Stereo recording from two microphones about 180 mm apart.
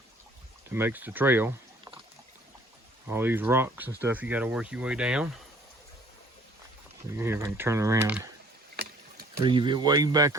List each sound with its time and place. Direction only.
0.7 s speech: 10° right (ahead or behind)
3.1 s speech: 10° right (ahead or behind)
7.2 s speech: 15° right (ahead or behind)
8.7 s boat: 60° right (ahead or behind)
9.4 s speech: 25° right (ahead or behind)